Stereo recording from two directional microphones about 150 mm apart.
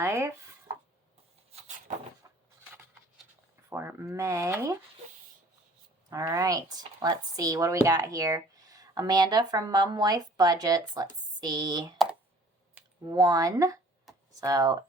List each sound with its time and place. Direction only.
0.0 s chopping: 15° right (ahead or behind)
2.2 s cupboard open or close: 25° right (ahead or behind)
3.7 s speech: 15° right (ahead or behind)
6.1 s speech: 20° right (ahead or behind)
13.1 s speech: 30° right (ahead or behind)
14.1 s computer keyboard: centre (ahead or behind)
14.4 s speech: 25° right (ahead or behind)